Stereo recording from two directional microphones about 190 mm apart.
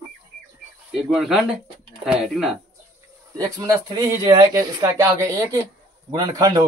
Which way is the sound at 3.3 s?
20° right (ahead or behind).